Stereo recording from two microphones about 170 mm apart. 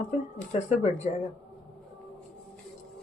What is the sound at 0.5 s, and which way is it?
Speech, 40° left (ahead or behind).